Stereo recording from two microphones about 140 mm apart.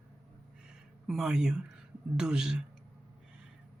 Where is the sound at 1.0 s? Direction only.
5° right (ahead or behind).